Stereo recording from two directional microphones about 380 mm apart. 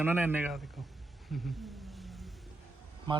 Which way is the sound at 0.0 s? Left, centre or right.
Centre.